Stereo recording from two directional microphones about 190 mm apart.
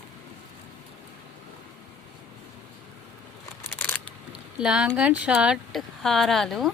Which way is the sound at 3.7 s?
10° left (ahead or behind).